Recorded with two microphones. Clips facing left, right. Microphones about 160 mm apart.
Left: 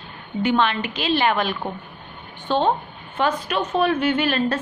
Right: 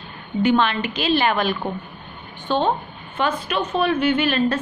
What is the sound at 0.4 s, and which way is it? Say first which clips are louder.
A woman's voice: right 2 dB; 20° left (ahead or behind).